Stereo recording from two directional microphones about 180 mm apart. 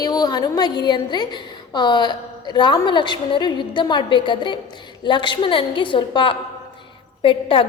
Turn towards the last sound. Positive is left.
turn(degrees=30)  # may be behind; listen again after turning